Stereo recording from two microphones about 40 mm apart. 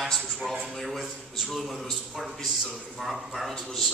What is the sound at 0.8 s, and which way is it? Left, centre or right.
A man's voice, centre.